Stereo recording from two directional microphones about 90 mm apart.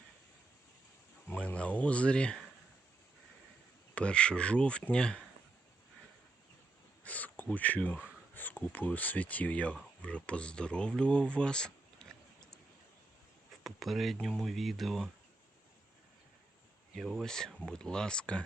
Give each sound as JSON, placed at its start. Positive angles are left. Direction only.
{"t": 1.3, "sound": "speech", "side_deg": 15}
{"t": 3.9, "sound": "speech", "side_deg": 10}
{"t": 7.0, "sound": "speech", "side_deg": 15}
{"t": 13.7, "sound": "speech", "side_deg": 0}
{"t": 16.9, "sound": "speech", "side_deg": 0}